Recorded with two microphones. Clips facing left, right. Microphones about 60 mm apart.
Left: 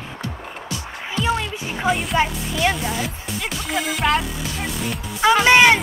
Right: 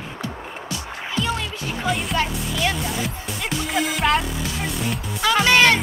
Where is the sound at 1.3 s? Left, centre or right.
Centre.